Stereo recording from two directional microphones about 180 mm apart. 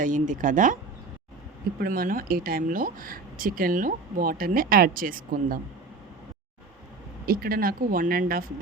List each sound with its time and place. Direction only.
0.0 s a woman's voice: 45° right (ahead or behind)
1.8 s a woman's voice: 50° right (ahead or behind)
7.3 s a woman's voice: 55° right (ahead or behind)